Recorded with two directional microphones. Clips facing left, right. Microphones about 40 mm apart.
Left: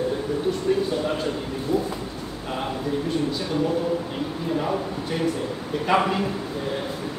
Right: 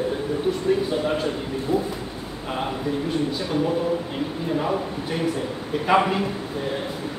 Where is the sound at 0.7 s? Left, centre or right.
Centre.